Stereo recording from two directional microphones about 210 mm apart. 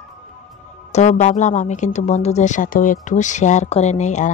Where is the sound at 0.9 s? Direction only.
35° left (ahead or behind).